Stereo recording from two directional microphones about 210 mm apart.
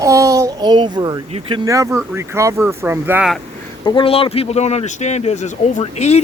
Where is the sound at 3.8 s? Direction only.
25° left (ahead or behind).